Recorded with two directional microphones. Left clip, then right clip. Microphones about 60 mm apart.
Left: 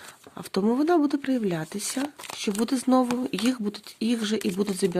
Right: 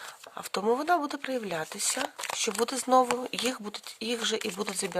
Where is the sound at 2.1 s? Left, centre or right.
Right.